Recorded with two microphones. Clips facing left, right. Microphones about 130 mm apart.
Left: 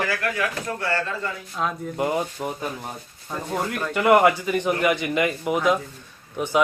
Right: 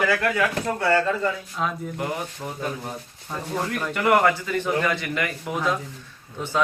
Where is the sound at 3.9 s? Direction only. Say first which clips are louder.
Left 3 dB; 10° left (ahead or behind).